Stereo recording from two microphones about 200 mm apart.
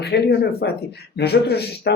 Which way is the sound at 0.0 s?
55° left (ahead or behind).